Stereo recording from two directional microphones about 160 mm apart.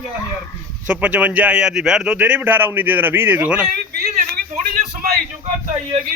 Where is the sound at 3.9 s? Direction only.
75° right (ahead or behind).